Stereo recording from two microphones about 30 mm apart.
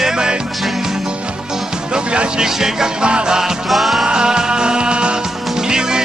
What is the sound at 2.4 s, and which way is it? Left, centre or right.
Speech, centre.